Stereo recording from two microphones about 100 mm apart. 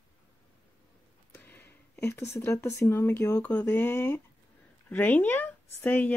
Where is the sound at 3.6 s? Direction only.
25° left (ahead or behind).